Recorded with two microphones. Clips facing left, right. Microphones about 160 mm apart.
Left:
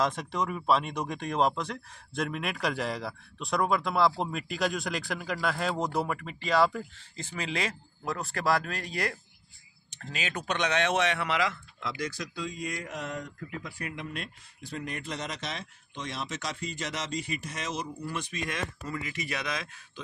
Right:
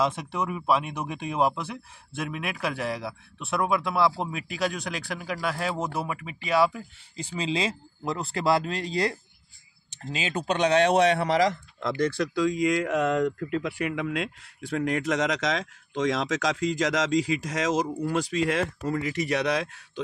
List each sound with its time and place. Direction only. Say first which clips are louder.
0.0 s speech: right 2 dB; 10° right (ahead or behind)
7.3 s speech: right 5 dB; 20° right (ahead or behind); by 19.7 s 70° right (ahead or behind)